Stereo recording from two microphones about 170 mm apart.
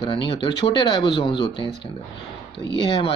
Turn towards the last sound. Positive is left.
turn(degrees=25)  # may be behind; listen again after turning